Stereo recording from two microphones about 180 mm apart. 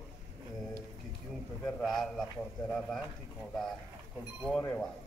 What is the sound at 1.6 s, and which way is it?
A man's voice, centre (ahead or behind).